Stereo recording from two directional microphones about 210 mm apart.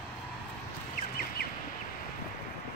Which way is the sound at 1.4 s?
50° left (ahead or behind).